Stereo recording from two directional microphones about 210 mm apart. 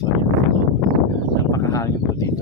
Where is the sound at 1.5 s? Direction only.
15° left (ahead or behind).